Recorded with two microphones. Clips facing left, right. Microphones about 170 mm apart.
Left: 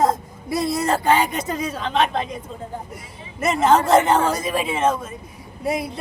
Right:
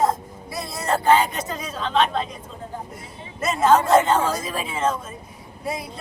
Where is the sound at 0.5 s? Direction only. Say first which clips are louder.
Left 10 dB; 15° left (ahead or behind).